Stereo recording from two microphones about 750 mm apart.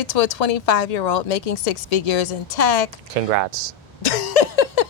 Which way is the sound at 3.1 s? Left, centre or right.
Right.